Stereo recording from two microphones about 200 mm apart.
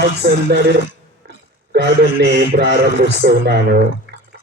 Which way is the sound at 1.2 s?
55° right (ahead or behind).